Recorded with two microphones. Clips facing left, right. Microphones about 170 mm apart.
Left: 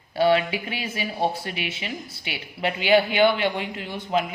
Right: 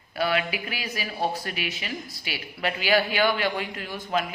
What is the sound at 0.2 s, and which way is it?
Speech, 30° left (ahead or behind).